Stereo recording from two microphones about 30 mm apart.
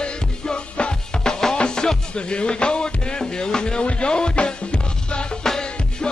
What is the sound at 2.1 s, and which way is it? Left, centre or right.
Speech, left.